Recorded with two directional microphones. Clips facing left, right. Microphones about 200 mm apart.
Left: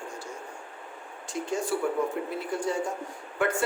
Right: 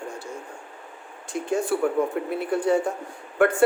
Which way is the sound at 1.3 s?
55° right (ahead or behind).